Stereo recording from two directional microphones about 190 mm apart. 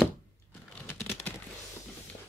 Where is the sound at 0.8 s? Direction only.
10° left (ahead or behind).